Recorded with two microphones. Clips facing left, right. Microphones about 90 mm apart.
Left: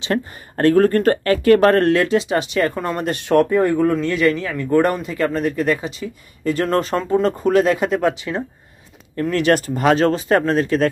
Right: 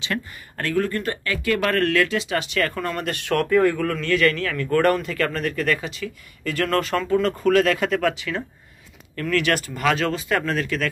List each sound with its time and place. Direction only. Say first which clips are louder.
0.0 s speech: left 7 dB; 35° left (ahead or behind)